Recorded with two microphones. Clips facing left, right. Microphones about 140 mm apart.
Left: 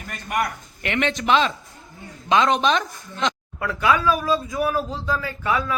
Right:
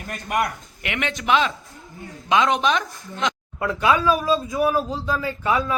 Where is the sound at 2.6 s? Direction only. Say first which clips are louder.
Left 1 dB; 5° right (ahead or behind).